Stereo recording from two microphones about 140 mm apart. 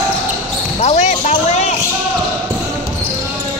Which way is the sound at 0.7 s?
50° left (ahead or behind).